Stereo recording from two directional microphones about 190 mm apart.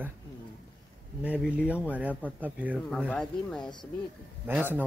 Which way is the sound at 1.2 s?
5° right (ahead or behind).